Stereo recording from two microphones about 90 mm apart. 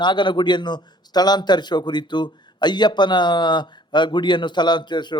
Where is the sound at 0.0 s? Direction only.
60° left (ahead or behind).